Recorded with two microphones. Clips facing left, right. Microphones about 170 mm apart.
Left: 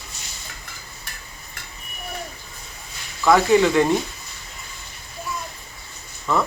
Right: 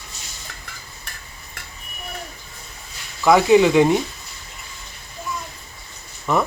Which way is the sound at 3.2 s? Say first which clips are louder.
Right 2 dB; 15° right (ahead or behind).